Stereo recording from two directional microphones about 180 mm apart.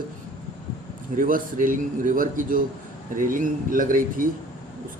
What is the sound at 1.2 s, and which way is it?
A man's voice, 50° right (ahead or behind).